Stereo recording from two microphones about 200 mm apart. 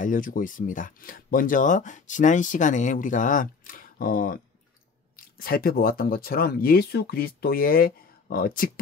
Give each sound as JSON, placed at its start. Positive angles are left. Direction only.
{"t": 0.0, "sound": "speech", "side_deg": 40}